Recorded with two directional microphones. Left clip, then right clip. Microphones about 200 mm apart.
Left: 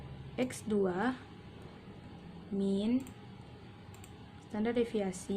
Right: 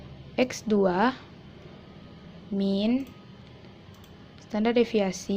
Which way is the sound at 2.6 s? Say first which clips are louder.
Right 7 dB; 30° right (ahead or behind).